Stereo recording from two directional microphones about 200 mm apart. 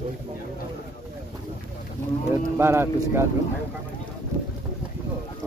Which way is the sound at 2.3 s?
10° right (ahead or behind).